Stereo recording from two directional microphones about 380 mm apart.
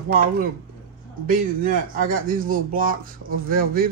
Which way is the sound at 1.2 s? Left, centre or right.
Right.